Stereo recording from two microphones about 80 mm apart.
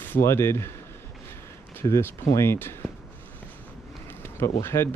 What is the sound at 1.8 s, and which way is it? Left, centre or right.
Speech, left.